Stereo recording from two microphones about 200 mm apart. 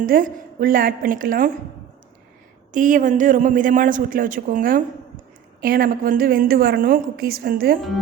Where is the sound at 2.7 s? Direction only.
40° right (ahead or behind).